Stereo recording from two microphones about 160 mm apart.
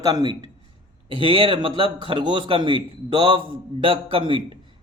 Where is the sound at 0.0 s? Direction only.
25° right (ahead or behind).